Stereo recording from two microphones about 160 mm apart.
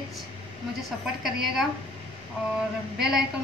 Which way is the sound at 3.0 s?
5° right (ahead or behind).